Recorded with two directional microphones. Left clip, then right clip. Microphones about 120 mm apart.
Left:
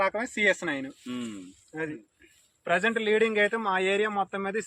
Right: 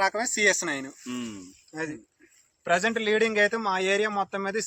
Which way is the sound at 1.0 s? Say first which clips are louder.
Right 1 dB; 30° left (ahead or behind).